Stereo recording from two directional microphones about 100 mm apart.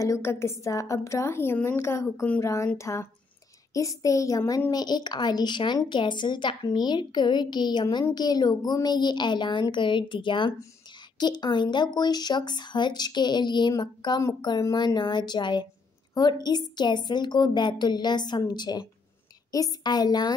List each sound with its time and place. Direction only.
0.0 s a woman's voice: 30° left (ahead or behind); by 20.3 s 45° left (ahead or behind)